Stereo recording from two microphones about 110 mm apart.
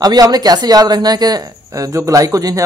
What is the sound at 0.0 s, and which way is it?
Speech, 35° right (ahead or behind).